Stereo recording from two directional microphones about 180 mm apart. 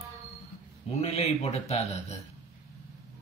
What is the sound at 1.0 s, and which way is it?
A man's voice, 35° left (ahead or behind).